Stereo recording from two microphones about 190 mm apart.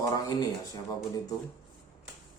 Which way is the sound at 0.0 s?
20° left (ahead or behind).